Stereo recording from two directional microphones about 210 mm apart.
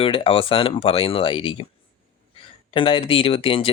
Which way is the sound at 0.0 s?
25° left (ahead or behind).